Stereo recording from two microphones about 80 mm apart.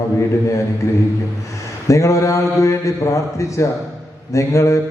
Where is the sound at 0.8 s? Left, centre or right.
Left.